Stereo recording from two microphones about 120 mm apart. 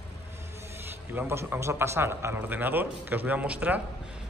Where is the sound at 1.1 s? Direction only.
20° right (ahead or behind).